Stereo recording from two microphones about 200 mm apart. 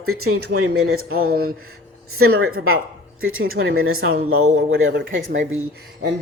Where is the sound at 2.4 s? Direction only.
90° right.